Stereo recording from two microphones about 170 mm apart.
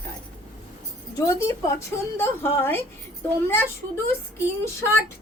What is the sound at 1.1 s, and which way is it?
A woman's voice, 20° left (ahead or behind).